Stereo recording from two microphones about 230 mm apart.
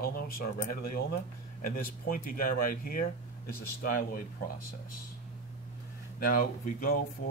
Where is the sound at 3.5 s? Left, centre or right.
Left.